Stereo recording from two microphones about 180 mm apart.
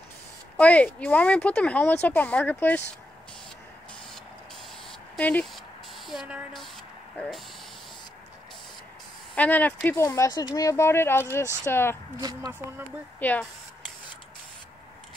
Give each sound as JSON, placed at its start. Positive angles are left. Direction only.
{"t": 0.6, "sound": "speech", "side_deg": 10}
{"t": 5.1, "sound": "a woman's voice", "side_deg": 5}
{"t": 9.3, "sound": "speech", "side_deg": 10}
{"t": 12.2, "sound": "speech", "side_deg": -20}
{"t": 13.2, "sound": "speech", "side_deg": 10}